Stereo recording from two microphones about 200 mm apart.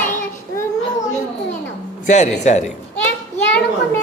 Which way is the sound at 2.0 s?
35° left (ahead or behind).